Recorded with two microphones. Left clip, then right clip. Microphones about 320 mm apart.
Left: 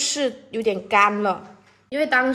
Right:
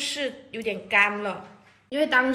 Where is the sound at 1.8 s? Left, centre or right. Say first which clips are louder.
Left 2 dB; centre.